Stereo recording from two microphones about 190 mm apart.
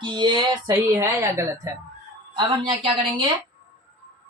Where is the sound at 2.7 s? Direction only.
30° right (ahead or behind).